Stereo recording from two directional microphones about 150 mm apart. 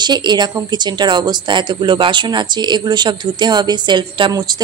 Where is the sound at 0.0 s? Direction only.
30° right (ahead or behind).